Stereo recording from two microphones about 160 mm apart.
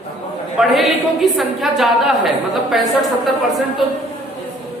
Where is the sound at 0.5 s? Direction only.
Centre (ahead or behind).